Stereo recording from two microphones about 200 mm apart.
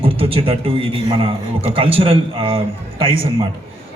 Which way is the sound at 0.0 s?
25° right (ahead or behind).